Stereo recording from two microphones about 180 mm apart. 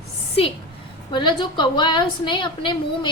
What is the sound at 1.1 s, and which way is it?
A woman's voice, 25° left (ahead or behind).